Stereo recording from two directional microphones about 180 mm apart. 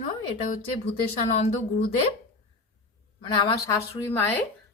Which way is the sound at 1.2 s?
40° left (ahead or behind).